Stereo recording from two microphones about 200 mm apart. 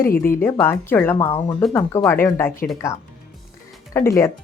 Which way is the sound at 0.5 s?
10° left (ahead or behind).